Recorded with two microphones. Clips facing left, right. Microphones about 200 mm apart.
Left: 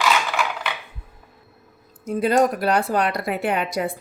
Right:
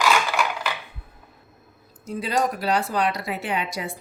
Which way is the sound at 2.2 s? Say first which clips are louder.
Left 6 dB; 55° left (ahead or behind).